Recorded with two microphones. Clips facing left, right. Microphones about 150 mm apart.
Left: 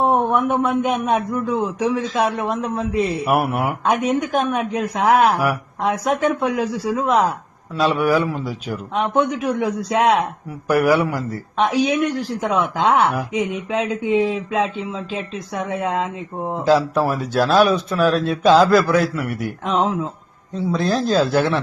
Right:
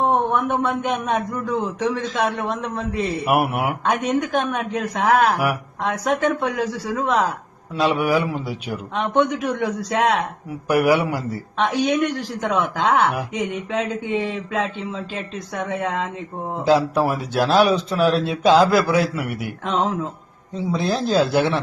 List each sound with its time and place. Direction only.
0.0 s speech: 10° left (ahead or behind)
3.2 s a man's voice: 10° right (ahead or behind)
3.8 s speech: 10° left (ahead or behind)
7.8 s a man's voice: 15° right (ahead or behind)
9.1 s speech: 10° left (ahead or behind)
10.7 s a man's voice: 15° right (ahead or behind)
11.5 s speech: 10° left (ahead or behind)
16.6 s a man's voice: 15° right (ahead or behind)
19.6 s speech: 10° left (ahead or behind)
20.5 s a man's voice: 15° right (ahead or behind)